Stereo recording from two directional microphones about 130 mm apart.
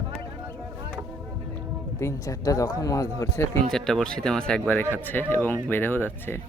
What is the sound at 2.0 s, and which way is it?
Speech, 25° left (ahead or behind).